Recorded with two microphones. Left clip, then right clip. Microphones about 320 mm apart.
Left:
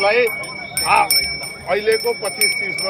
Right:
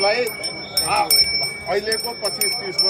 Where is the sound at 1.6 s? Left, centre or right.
Centre.